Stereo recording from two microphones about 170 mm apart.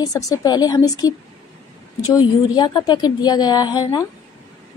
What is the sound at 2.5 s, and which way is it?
A woman's voice, 25° left (ahead or behind).